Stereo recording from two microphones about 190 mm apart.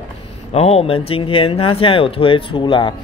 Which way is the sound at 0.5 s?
30° left (ahead or behind).